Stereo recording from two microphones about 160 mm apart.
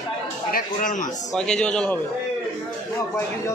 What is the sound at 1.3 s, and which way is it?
Speech, 5° left (ahead or behind).